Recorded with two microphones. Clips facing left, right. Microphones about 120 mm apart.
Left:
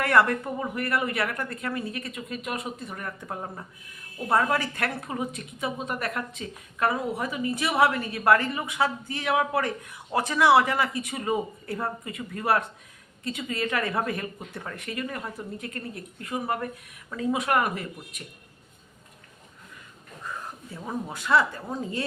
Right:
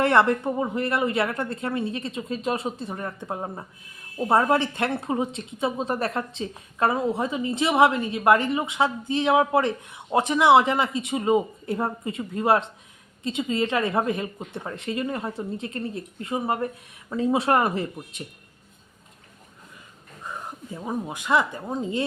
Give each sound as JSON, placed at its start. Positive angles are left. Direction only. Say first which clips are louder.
{"t": 0.0, "sound": "a woman's voice", "louder": "right 3 dB", "side_deg": -25}
{"t": 20.2, "sound": "speech", "louder": "right 2 dB", "side_deg": -20}